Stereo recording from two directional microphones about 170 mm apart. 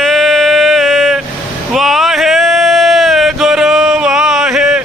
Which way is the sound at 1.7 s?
Centre (ahead or behind).